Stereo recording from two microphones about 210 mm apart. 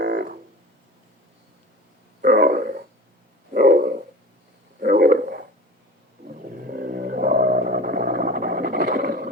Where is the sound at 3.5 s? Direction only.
45° right (ahead or behind).